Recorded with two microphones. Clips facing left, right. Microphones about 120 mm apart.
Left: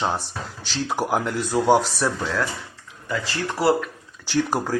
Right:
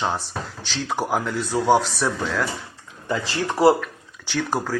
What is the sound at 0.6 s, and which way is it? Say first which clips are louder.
A man's voice: left 1 dB; 5° left (ahead or behind).